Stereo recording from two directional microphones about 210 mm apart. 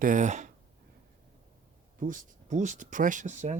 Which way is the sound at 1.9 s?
40° right (ahead or behind).